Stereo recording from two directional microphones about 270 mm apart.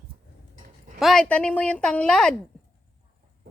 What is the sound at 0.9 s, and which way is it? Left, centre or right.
A woman's voice, centre.